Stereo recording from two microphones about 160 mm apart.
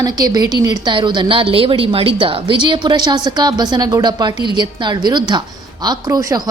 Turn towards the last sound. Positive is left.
turn(degrees=-20)  # may be behind; listen again after turning